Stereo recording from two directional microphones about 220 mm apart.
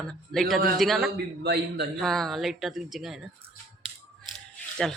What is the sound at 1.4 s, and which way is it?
Speech, 50° right (ahead or behind).